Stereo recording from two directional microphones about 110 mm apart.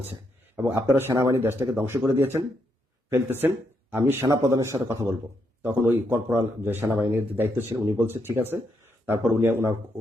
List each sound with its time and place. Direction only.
0.0 s a sound: 20° right (ahead or behind)
0.9 s speech: 25° right (ahead or behind)
4.3 s speech: 30° right (ahead or behind)